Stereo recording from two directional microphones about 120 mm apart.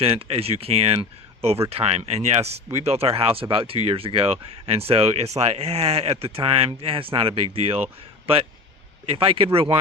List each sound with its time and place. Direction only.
0.0 s speech: 55° right (ahead or behind)
9.0 s speech: 45° right (ahead or behind)